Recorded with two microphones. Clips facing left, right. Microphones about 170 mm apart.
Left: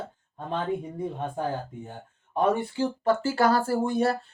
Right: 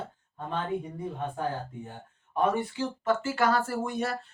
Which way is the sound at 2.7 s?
35° left (ahead or behind).